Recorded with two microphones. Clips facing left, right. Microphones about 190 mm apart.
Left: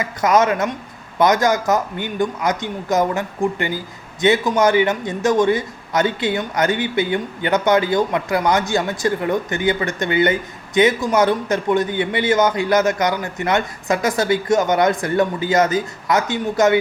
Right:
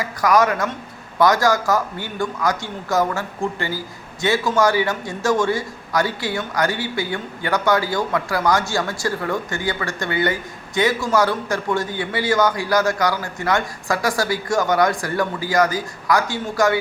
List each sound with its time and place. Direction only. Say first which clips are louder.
0.0 s a man's voice: left 1 dB; 20° left (ahead or behind)